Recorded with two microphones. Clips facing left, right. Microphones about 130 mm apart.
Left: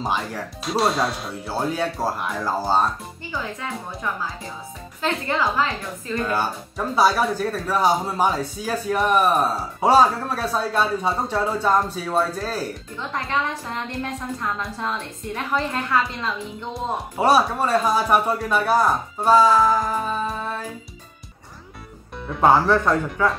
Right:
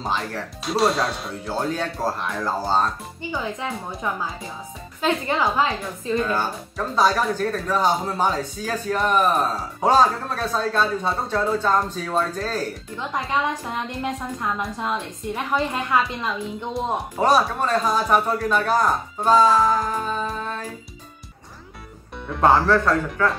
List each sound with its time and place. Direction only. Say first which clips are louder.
0.0 s speech: left 1 dB; 10° left (ahead or behind)
3.3 s speech: right 3 dB; 20° right (ahead or behind)
5.0 s speech: right 1 dB; 15° right (ahead or behind)
6.2 s speech: even; 10° left (ahead or behind)
13.3 s a woman's voice: right 1 dB; 15° right (ahead or behind)
16.7 s speech: right 1 dB; 5° left (ahead or behind)
22.3 s speech: even; 10° left (ahead or behind)